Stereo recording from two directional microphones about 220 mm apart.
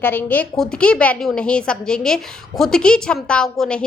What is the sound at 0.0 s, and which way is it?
A woman's voice, 10° left (ahead or behind).